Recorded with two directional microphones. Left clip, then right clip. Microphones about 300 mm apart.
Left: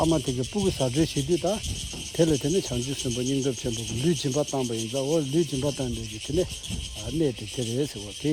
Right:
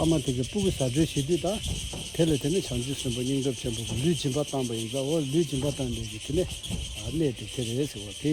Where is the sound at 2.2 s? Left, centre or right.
Left.